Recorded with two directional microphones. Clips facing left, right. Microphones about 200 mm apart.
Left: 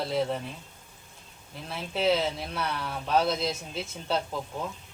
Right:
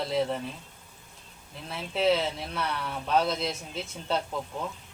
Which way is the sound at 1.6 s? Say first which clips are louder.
Right 1 dB; centre (ahead or behind).